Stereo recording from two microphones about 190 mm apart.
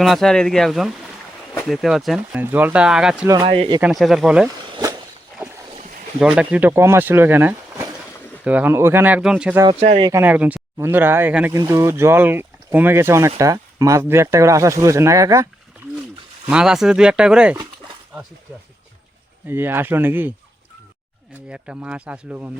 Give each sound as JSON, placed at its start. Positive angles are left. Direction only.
{"t": 0.0, "sound": "speech", "side_deg": 0}
{"t": 3.2, "sound": "speech", "side_deg": -25}
{"t": 3.8, "sound": "speech", "side_deg": -5}
{"t": 4.7, "sound": "walk", "side_deg": -20}
{"t": 6.1, "sound": "speech", "side_deg": -5}
{"t": 16.5, "sound": "speech", "side_deg": -5}
{"t": 19.5, "sound": "speech", "side_deg": -10}
{"t": 21.5, "sound": "speech", "side_deg": -5}